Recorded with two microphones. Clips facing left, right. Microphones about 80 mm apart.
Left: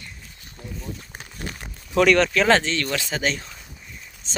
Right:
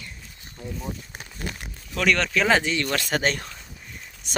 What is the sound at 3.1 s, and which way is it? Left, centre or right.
Speech, right.